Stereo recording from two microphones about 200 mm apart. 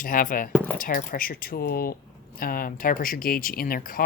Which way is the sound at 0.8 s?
45° left (ahead or behind).